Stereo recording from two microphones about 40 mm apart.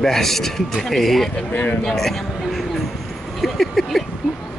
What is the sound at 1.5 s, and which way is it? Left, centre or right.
Speech, left.